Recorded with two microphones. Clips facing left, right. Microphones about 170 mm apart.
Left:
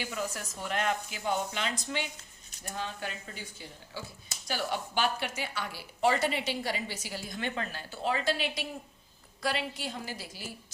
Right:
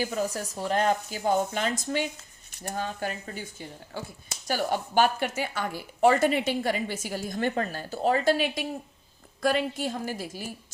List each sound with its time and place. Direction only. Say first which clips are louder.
0.0 s speech: right 7 dB; 40° right (ahead or behind)